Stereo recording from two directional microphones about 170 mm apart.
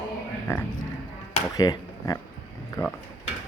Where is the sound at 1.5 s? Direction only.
20° left (ahead or behind).